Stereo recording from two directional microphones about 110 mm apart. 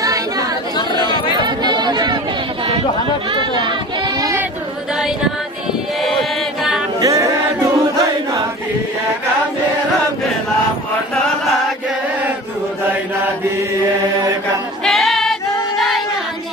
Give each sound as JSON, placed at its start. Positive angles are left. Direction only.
{"t": 0.0, "sound": "chatter", "side_deg": -35}
{"t": 0.9, "sound": "chatter", "side_deg": -45}
{"t": 3.3, "sound": "speech", "side_deg": -45}
{"t": 6.0, "sound": "chant", "side_deg": 0}
{"t": 7.0, "sound": "choir", "side_deg": -30}
{"t": 14.9, "sound": "singing", "side_deg": 0}